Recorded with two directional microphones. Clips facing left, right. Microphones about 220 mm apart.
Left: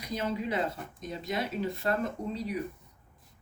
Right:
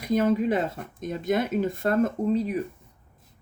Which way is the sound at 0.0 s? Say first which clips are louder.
Right 10 dB; 50° right (ahead or behind).